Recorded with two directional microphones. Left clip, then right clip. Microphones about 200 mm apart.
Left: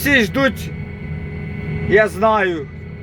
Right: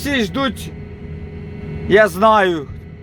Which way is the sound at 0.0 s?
5° left (ahead or behind).